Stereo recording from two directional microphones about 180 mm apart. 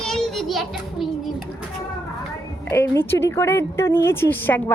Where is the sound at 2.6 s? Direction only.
10° left (ahead or behind).